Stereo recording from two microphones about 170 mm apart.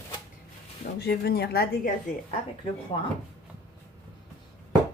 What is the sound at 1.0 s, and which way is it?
Speech, 70° left (ahead or behind).